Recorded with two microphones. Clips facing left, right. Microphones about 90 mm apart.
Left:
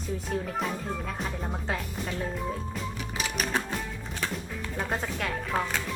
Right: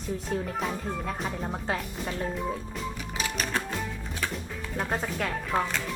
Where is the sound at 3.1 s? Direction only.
5° left (ahead or behind).